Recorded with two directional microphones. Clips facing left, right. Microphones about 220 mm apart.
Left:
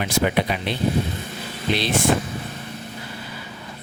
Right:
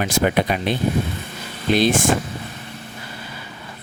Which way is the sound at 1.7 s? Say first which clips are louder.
Right 6 dB; 45° right (ahead or behind).